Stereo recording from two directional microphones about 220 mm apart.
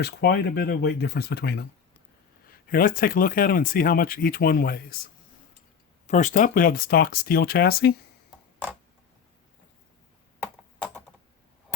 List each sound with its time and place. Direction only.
0.0 s speech: 50° left (ahead or behind)
6.1 s speech: 35° left (ahead or behind)